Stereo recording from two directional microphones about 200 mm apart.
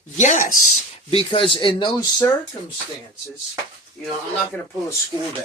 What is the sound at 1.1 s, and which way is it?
Speech, 25° left (ahead or behind).